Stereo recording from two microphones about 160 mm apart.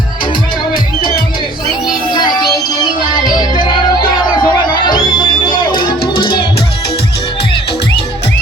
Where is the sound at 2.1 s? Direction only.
25° left (ahead or behind).